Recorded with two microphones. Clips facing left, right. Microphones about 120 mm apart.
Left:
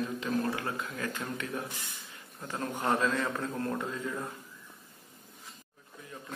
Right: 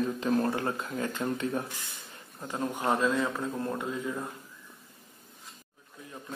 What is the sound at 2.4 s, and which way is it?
Speech, 15° right (ahead or behind).